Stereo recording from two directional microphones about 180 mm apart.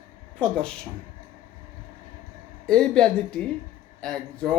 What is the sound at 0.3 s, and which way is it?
Speech, 5° left (ahead or behind).